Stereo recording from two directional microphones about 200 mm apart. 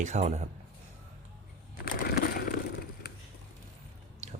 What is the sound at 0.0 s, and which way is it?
Speech, 35° right (ahead or behind).